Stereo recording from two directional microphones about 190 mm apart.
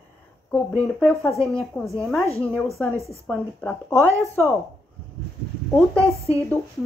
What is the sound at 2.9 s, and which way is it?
Speech, 15° right (ahead or behind).